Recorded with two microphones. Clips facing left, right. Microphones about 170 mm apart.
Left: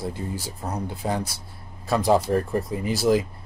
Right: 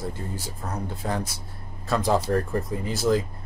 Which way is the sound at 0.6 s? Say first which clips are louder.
Left 2 dB; 25° left (ahead or behind).